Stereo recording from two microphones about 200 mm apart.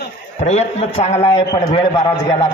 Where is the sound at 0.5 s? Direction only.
30° left (ahead or behind).